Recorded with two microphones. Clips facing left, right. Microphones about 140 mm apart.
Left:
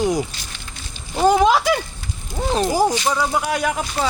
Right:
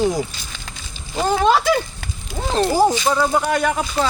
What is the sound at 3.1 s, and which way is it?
Speech, 5° left (ahead or behind).